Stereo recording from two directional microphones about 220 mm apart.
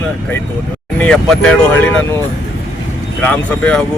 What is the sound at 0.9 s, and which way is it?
Speech, 5° left (ahead or behind).